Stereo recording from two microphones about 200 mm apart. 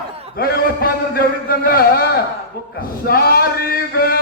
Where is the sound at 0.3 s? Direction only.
50° left (ahead or behind).